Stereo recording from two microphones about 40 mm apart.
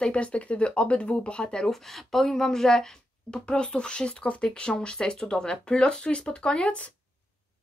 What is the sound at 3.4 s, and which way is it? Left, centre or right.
Speech, left.